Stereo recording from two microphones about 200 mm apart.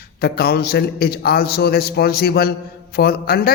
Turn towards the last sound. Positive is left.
turn(degrees=50)  # may be behind; listen again after turning